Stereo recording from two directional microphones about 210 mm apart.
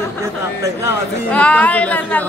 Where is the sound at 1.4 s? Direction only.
5° left (ahead or behind).